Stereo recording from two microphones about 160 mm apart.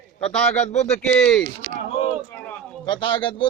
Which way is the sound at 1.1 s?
5° left (ahead or behind).